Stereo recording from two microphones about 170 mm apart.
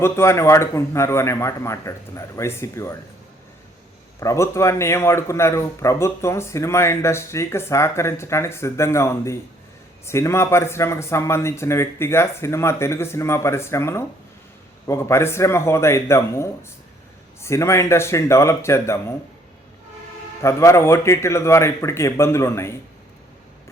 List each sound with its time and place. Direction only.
0.0 s a man's voice: 15° left (ahead or behind)
4.2 s a man's voice: 15° left (ahead or behind)
20.4 s a man's voice: 15° left (ahead or behind)